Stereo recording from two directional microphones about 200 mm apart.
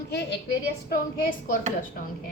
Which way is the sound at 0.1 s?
60° left (ahead or behind).